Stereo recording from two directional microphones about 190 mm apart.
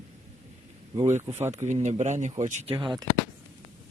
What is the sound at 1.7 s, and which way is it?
Speech, 40° right (ahead or behind).